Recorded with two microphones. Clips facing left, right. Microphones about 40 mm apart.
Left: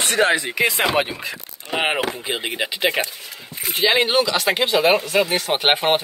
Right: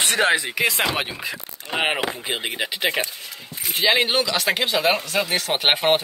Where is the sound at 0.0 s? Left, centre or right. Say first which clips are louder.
Left 1 dB; centre.